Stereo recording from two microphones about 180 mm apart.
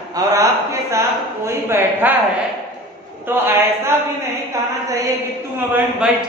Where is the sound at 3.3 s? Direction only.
10° right (ahead or behind).